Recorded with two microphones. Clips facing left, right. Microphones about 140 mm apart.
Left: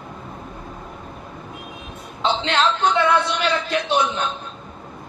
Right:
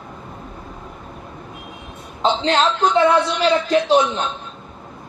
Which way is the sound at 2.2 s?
35° right (ahead or behind).